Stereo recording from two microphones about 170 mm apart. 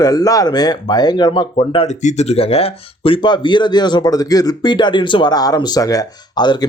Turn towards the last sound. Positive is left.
turn(degrees=25)  # may be behind; listen again after turning